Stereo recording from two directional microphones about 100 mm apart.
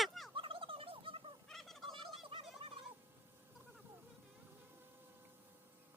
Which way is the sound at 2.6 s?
65° right (ahead or behind).